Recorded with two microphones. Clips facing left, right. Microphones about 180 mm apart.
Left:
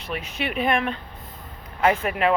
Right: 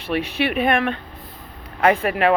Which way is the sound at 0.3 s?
60° right (ahead or behind).